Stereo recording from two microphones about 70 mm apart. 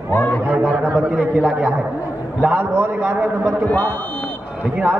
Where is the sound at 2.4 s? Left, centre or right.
Right.